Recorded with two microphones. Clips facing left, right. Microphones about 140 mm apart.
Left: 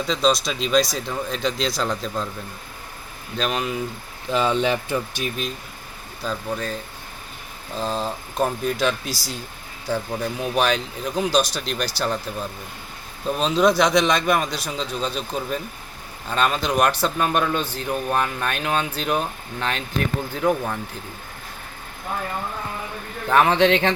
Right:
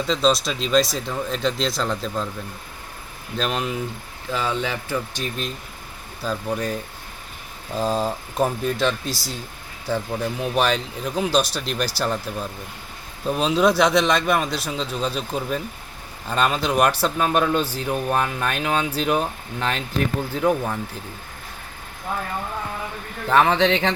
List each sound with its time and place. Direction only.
0.1 s a man's voice: centre (ahead or behind)
3.3 s a man's voice: centre (ahead or behind)
4.3 s speech: 20° left (ahead or behind)
6.2 s a man's voice: 5° right (ahead or behind)
7.8 s a man's voice: 10° right (ahead or behind)
23.2 s a man's voice: 5° left (ahead or behind)